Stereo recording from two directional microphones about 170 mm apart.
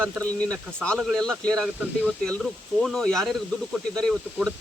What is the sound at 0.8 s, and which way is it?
Speech, 5° left (ahead or behind).